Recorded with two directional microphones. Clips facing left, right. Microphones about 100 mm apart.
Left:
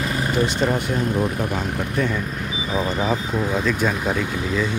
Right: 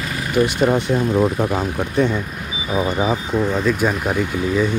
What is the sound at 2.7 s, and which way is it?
Speech, 15° right (ahead or behind).